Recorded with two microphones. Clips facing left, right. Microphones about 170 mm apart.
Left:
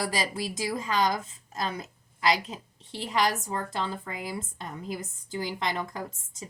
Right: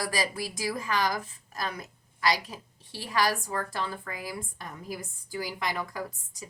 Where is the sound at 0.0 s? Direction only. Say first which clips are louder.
Left 1 dB; 25° left (ahead or behind).